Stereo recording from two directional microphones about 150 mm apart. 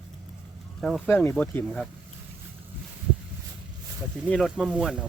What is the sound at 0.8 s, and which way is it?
Speech, centre (ahead or behind).